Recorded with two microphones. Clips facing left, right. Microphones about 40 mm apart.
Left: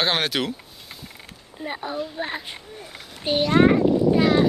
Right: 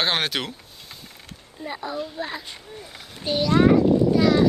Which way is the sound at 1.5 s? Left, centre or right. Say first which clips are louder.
Left 1 dB; left.